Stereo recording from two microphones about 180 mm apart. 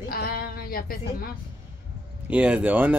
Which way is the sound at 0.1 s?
55° left (ahead or behind).